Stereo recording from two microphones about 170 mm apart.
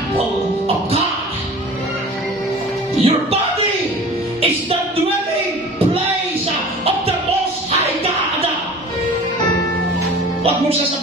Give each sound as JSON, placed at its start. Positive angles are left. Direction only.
{"t": 3.0, "sound": "music", "side_deg": -35}